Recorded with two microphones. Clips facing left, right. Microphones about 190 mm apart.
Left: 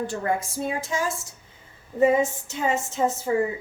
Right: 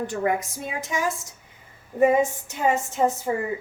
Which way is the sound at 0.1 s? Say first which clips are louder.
Right 2 dB; 15° right (ahead or behind).